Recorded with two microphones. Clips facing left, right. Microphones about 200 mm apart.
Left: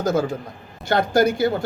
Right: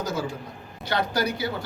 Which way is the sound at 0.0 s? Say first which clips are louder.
Left 8 dB; 50° left (ahead or behind).